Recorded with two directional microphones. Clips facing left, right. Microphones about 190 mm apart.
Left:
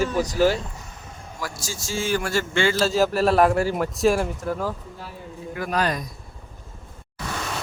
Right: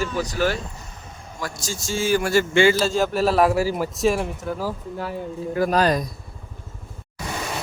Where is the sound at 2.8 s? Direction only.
Centre (ahead or behind).